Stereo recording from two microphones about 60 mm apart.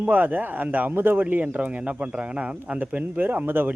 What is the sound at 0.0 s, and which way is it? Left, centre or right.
Speech, right.